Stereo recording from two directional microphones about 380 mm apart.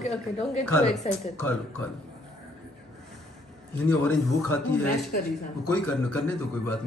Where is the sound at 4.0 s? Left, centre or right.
Centre.